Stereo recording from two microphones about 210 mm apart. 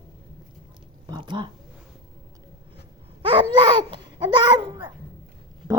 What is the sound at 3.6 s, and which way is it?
Babbling, 25° right (ahead or behind).